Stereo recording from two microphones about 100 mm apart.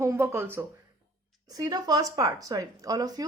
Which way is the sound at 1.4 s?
40° right (ahead or behind).